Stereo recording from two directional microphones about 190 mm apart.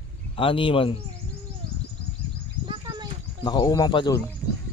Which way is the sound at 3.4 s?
20° left (ahead or behind).